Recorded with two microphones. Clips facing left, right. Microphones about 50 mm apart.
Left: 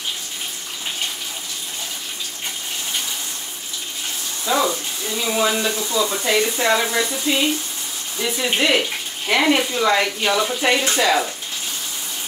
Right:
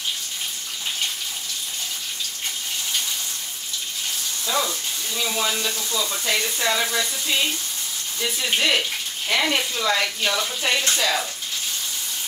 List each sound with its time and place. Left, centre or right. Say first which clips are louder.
4.5 s speech: left 6 dB; left